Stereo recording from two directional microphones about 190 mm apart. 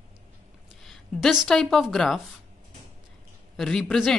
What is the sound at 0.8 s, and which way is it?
Speech, centre (ahead or behind).